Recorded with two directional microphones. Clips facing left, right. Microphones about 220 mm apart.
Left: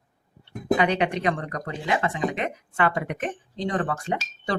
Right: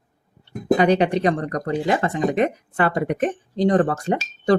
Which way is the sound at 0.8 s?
35° right (ahead or behind).